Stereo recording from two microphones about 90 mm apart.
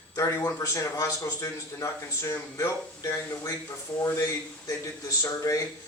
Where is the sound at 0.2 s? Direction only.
35° left (ahead or behind).